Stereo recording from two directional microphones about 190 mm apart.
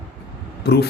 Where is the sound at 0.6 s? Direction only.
55° left (ahead or behind).